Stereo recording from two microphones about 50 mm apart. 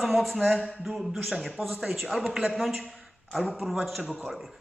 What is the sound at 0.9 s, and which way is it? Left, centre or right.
A man's voice, centre.